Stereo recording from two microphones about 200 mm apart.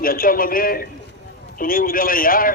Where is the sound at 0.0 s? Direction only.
45° left (ahead or behind).